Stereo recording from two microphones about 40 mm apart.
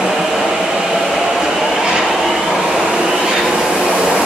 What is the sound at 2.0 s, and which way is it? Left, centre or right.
Vehicle, centre.